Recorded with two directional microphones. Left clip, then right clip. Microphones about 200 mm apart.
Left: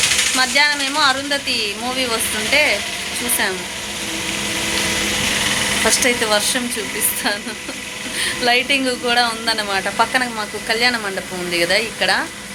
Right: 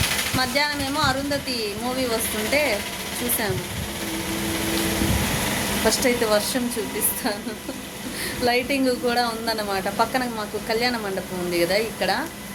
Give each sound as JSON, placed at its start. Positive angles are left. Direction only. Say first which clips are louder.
{"t": 0.0, "sound": "a sound", "louder": "left 7 dB", "side_deg": -55}
{"t": 0.3, "sound": "speech", "louder": "left 7 dB", "side_deg": -5}
{"t": 5.9, "sound": "speech", "louder": "left 2 dB", "side_deg": 0}
{"t": 8.2, "sound": "speech", "louder": "left 6 dB", "side_deg": -5}